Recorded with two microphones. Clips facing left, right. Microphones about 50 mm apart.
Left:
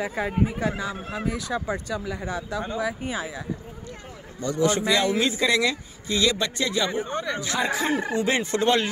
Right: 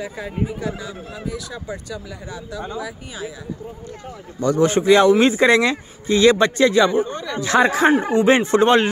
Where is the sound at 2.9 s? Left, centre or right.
Left.